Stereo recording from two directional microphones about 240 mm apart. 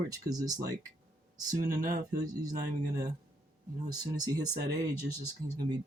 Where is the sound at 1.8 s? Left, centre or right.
Right.